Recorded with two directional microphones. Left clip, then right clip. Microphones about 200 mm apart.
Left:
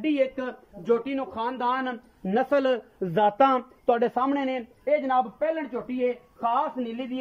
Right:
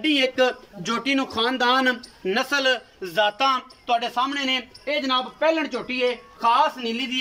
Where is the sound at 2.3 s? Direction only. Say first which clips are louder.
Right 2 dB; 35° left (ahead or behind).